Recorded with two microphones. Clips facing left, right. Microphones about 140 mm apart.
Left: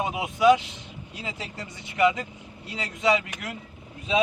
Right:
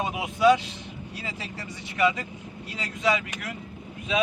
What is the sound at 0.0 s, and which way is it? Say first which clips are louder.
Speech: left 1 dB; 15° left (ahead or behind).